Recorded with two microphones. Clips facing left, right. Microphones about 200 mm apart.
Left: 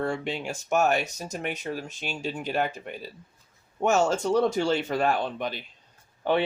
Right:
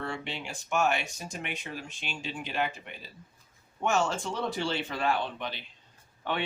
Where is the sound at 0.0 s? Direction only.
45° left (ahead or behind).